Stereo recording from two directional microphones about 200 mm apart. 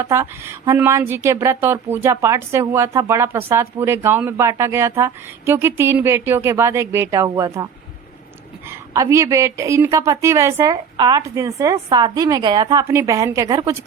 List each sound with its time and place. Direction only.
0.0 s a woman's voice: 15° right (ahead or behind)
8.9 s a woman's voice: 15° right (ahead or behind)